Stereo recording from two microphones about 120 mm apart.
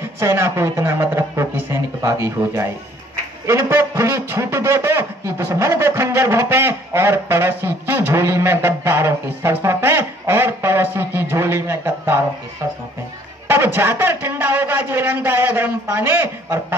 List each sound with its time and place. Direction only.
0.2 s a man's voice: 20° right (ahead or behind)
13.5 s speech: 20° right (ahead or behind)